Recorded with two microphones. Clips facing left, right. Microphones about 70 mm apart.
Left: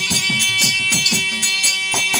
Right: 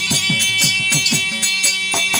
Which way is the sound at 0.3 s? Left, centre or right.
Centre.